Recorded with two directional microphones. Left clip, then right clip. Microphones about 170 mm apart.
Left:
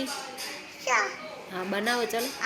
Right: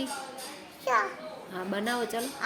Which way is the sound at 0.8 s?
20° right (ahead or behind).